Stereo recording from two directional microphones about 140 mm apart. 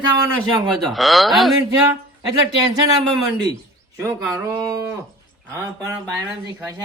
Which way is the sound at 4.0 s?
20° right (ahead or behind).